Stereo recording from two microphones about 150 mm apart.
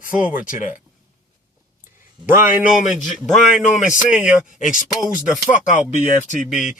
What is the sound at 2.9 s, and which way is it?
Speech, centre (ahead or behind).